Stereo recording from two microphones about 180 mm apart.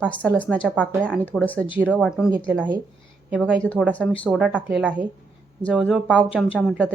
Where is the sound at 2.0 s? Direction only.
5° right (ahead or behind).